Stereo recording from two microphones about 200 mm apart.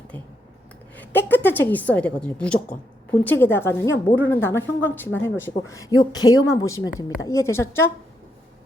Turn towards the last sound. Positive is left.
turn(degrees=10)  # may be behind; listen again after turning